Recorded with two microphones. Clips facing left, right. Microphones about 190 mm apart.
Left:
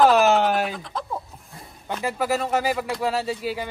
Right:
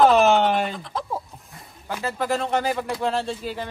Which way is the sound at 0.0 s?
Centre (ahead or behind).